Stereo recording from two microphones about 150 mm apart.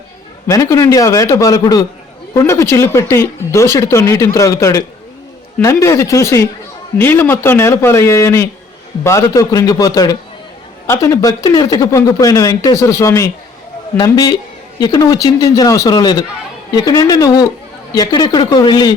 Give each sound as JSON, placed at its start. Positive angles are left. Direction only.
{"t": 0.4, "sound": "speech", "side_deg": 20}